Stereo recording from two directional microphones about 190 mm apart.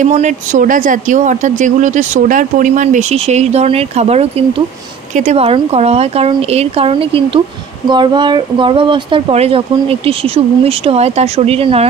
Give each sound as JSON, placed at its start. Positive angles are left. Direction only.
{"t": 0.0, "sound": "speech", "side_deg": -40}